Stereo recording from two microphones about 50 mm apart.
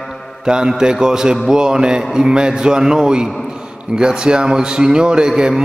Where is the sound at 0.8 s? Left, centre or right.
Centre.